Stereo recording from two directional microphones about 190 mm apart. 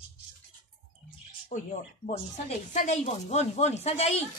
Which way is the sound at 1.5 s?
40° left (ahead or behind).